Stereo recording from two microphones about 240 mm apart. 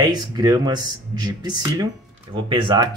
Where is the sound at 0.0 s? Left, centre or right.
Centre.